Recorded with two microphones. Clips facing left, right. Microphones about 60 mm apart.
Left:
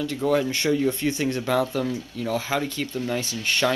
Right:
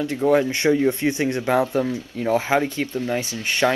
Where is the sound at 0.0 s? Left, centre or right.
Right.